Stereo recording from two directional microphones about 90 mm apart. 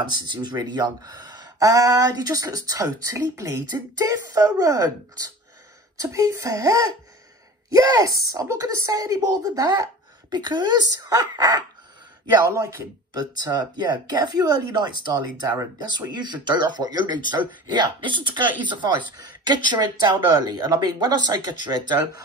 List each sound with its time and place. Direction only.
0.1 s speech: 55° right (ahead or behind)
12.4 s speech: 35° right (ahead or behind)
13.2 s speech: 50° right (ahead or behind)